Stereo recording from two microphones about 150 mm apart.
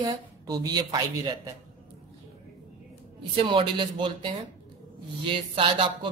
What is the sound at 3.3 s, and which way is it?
Speech, 35° right (ahead or behind).